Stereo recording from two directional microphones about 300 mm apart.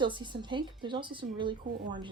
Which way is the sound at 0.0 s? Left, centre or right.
Centre.